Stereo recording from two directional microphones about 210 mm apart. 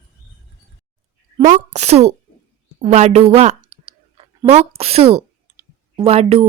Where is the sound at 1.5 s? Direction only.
35° right (ahead or behind).